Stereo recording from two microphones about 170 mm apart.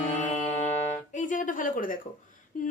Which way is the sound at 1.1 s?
50° left (ahead or behind).